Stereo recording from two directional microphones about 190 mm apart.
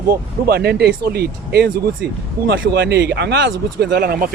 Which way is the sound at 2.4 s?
70° right (ahead or behind).